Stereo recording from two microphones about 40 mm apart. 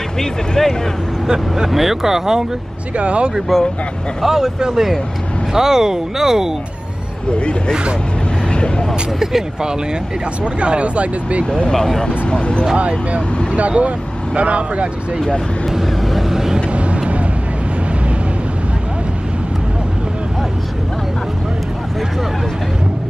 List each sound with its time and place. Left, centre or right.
0.2 s speech: centre
1.2 s speech: centre
1.7 s speech: centre
3.0 s speech: right
3.5 s speech: centre
4.2 s speech: centre
7.3 s speech: left
8.5 s vehicle: left
10.4 s speech: right
11.5 s speech: centre
12.3 s speech: left
12.7 s speech: right
15.7 s vehicle: centre
16.7 s vehicle: right